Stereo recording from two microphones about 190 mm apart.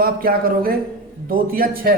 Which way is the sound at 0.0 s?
50° right (ahead or behind).